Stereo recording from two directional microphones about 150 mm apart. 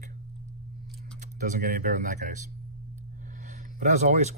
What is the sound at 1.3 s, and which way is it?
Speech, 60° right (ahead or behind).